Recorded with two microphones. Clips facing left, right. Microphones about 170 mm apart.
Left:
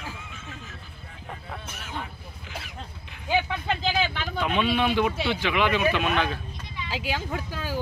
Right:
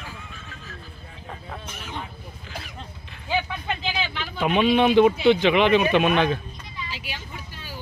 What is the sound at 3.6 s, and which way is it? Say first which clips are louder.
Vehicle: left 3 dB; 40° left (ahead or behind).